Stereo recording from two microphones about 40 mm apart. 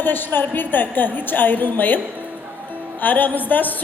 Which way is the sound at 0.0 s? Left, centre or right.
Left.